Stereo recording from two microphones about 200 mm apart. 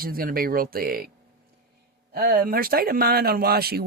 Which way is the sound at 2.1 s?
45° right (ahead or behind).